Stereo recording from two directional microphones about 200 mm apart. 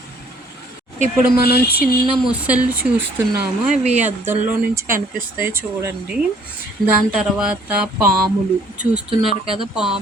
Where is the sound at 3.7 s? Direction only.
35° right (ahead or behind).